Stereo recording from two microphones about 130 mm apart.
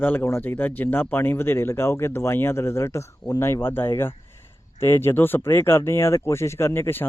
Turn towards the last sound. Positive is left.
turn(degrees=15)  # may be behind; listen again after turning